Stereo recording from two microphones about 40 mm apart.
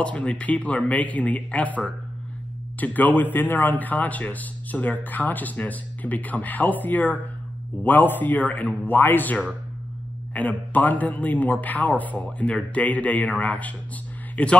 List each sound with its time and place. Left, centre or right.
0.0 s a man's voice: left
8.8 s a man's voice: left